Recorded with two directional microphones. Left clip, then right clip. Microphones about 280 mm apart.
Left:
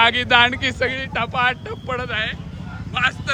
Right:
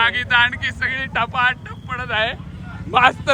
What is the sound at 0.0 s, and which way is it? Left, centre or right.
Speech, centre.